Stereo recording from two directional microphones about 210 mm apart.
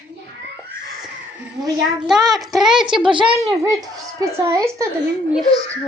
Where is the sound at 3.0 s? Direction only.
25° right (ahead or behind).